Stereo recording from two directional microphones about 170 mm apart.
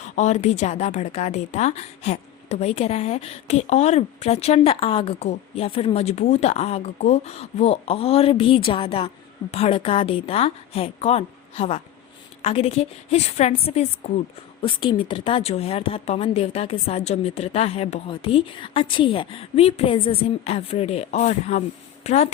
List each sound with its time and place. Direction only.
0.2 s speech: 45° left (ahead or behind)